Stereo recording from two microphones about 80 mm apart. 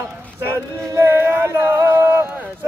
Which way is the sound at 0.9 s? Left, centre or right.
Right.